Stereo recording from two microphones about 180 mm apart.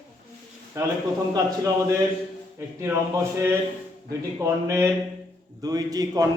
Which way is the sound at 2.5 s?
15° right (ahead or behind).